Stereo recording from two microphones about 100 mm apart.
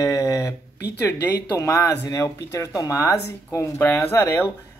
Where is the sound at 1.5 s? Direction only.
30° left (ahead or behind).